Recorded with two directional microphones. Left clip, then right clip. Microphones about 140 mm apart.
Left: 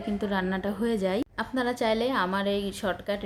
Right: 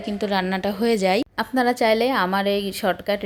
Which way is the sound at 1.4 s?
40° right (ahead or behind).